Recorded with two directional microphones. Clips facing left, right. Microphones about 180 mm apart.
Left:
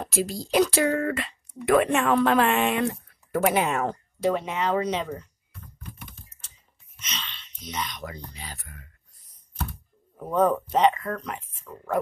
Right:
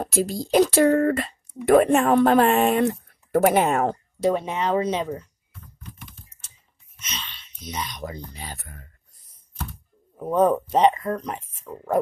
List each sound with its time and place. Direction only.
0.0 s a sound: 35° right (ahead or behind)
0.5 s speech: 40° right (ahead or behind)
4.3 s speech: 20° right (ahead or behind)
7.1 s speech: 10° right (ahead or behind)
8.3 s speech: 45° right (ahead or behind)
10.1 s speech: 10° right (ahead or behind)